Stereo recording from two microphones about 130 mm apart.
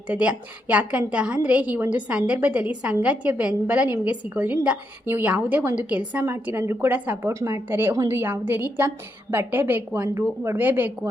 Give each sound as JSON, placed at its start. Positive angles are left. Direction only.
{"t": 0.1, "sound": "a woman's voice", "side_deg": -10}